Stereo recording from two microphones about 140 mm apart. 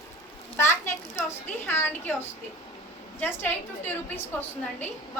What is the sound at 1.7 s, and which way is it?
Speech, 15° left (ahead or behind).